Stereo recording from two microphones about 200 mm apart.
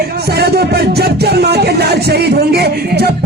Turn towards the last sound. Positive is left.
turn(degrees=-55)  # may be behind; listen again after turning